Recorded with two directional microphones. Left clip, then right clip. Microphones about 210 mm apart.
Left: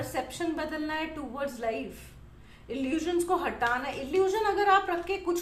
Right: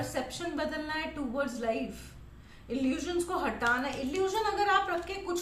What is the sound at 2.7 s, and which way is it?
A woman's voice, 30° left (ahead or behind).